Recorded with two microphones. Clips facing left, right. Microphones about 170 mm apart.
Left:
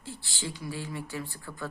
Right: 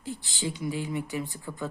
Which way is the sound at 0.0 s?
15° right (ahead or behind).